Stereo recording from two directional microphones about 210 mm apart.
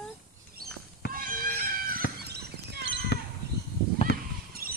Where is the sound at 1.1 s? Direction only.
40° right (ahead or behind).